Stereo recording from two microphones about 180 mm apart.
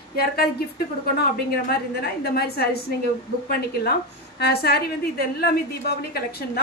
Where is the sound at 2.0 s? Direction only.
60° left (ahead or behind).